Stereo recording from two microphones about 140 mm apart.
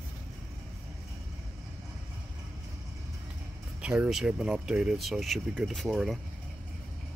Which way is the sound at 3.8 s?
10° right (ahead or behind).